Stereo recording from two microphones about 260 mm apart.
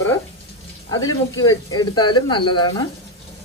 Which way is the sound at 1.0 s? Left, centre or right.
Left.